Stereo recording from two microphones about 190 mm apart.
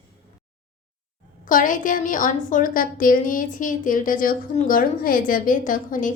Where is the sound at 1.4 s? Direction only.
45° left (ahead or behind).